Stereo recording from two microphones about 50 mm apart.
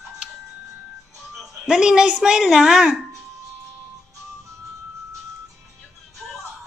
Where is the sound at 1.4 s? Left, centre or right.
Centre.